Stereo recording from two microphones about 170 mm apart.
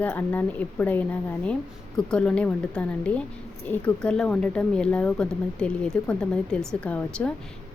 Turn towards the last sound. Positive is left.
turn(degrees=5)  # may be behind; listen again after turning